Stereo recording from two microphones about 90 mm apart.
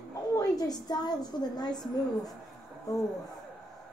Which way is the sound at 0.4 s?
45° left (ahead or behind).